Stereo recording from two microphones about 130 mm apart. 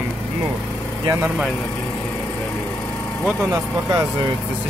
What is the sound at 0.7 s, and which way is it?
Vehicle, 10° left (ahead or behind).